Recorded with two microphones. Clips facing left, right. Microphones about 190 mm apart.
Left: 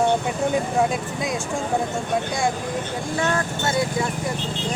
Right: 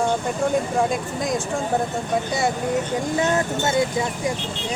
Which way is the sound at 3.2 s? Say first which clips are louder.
Right 1 dB; 20° right (ahead or behind).